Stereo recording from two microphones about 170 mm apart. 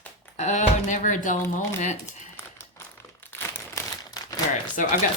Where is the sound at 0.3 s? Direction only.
45° left (ahead or behind).